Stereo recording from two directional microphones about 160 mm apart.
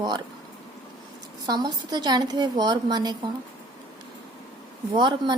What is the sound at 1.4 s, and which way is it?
A woman's voice, 25° right (ahead or behind).